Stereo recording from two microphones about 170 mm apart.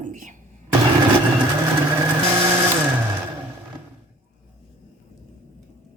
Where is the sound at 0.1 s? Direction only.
45° right (ahead or behind).